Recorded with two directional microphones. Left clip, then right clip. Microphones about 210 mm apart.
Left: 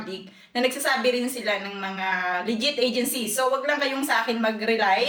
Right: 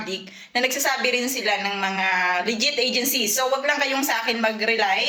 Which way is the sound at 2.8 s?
15° left (ahead or behind).